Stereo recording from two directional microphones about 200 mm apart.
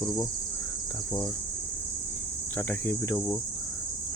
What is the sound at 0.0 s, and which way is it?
Cricket, 15° left (ahead or behind).